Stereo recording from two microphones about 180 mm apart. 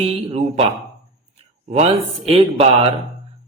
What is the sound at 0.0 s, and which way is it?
A man's voice, 35° right (ahead or behind).